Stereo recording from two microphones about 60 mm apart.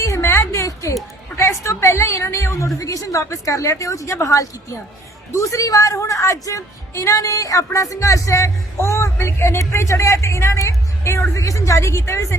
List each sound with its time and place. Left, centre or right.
0.0 s music: left
1.4 s a woman's voice: left
2.7 s a woman's voice: left